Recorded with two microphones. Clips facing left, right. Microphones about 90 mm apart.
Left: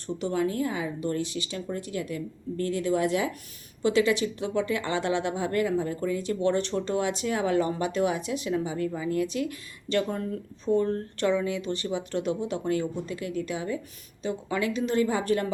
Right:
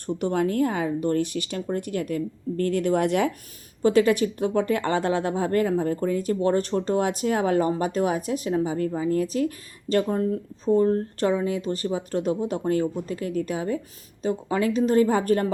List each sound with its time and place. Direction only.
0.2 s a woman's voice: 50° right (ahead or behind)
3.8 s a woman's voice: 50° right (ahead or behind)